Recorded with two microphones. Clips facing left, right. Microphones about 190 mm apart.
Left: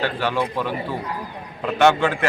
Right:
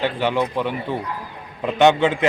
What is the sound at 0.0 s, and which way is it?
A man's voice, 20° right (ahead or behind).